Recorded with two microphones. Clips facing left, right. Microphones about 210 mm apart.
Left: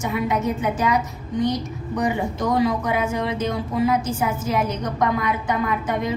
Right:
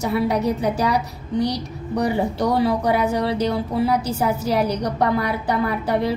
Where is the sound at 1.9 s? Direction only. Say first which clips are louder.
Right 2 dB; 35° right (ahead or behind).